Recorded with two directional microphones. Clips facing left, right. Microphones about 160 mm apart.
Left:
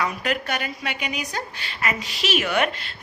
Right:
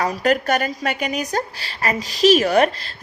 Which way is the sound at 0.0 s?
40° right (ahead or behind).